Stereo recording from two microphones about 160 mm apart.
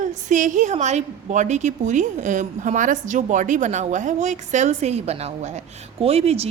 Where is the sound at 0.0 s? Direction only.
50° right (ahead or behind).